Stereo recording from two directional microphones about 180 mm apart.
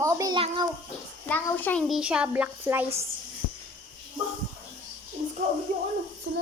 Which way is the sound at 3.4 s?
50° left (ahead or behind).